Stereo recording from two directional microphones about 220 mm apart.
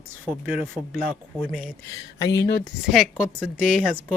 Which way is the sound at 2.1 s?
50° left (ahead or behind).